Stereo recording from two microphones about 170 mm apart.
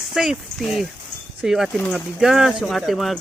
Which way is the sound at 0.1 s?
Centre (ahead or behind).